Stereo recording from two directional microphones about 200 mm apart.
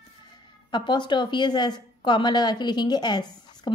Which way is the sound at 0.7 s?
20° left (ahead or behind).